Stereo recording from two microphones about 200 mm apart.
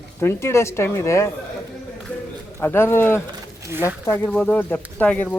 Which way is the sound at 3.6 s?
15° right (ahead or behind).